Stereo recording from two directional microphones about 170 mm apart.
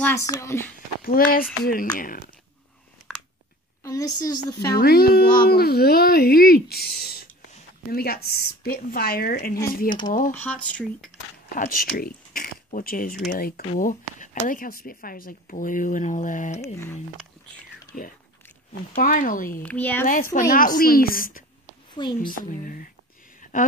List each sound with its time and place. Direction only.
0.0 s speech: 15° left (ahead or behind)
1.0 s speech: 60° left (ahead or behind)
3.8 s a woman's voice: 20° left (ahead or behind)
4.7 s speech: 65° left (ahead or behind)
9.8 s a woman's voice: 25° left (ahead or behind)
10.4 s speech: 5° left (ahead or behind)
11.5 s speech: 60° left (ahead or behind)
16.6 s speech: 15° left (ahead or behind)
18.7 s speech: 55° left (ahead or behind)
19.6 s speech: 10° left (ahead or behind)
20.3 s speech: 55° left (ahead or behind)